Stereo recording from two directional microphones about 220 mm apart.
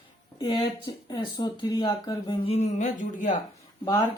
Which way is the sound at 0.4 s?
20° left (ahead or behind).